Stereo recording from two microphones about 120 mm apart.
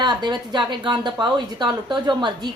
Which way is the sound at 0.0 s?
35° right (ahead or behind).